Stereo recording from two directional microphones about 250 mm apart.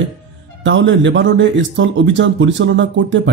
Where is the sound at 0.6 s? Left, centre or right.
Right.